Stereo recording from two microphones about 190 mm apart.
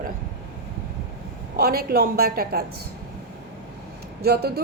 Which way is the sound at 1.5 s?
55° right (ahead or behind).